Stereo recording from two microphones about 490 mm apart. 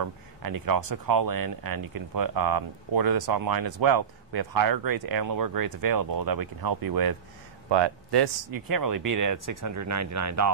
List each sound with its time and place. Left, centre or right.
0.0 s speech: right
7.7 s speech: right